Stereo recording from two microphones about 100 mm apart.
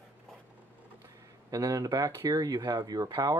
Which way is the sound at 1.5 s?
35° right (ahead or behind).